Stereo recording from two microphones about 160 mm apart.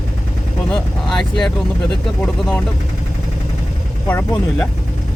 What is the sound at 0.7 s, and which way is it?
Speech, centre (ahead or behind).